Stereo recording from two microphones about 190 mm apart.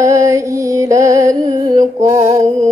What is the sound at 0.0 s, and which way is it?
Music, 15° right (ahead or behind).